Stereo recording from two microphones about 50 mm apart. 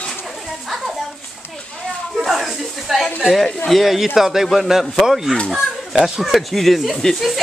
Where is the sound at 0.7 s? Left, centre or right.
Centre.